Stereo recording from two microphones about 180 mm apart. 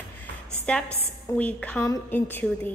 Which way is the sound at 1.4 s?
10° left (ahead or behind).